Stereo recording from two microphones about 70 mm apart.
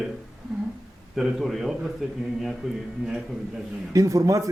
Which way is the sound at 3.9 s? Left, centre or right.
Right.